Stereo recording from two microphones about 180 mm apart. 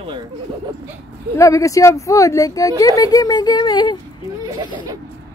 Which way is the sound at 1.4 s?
15° left (ahead or behind).